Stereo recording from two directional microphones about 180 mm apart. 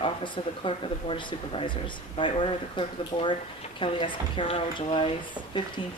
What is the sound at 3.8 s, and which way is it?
A woman's voice, 30° left (ahead or behind).